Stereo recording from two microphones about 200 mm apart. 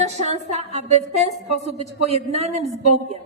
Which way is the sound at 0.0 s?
35° right (ahead or behind).